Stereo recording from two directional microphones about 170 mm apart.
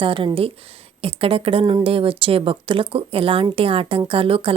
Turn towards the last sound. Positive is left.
turn(degrees=-30)  # may be behind; listen again after turning